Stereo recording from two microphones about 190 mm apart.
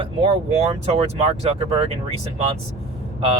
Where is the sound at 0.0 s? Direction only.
30° right (ahead or behind).